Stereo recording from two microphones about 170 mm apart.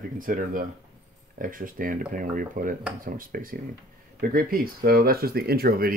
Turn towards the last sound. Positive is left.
turn(degrees=-65)  # may be behind; listen again after turning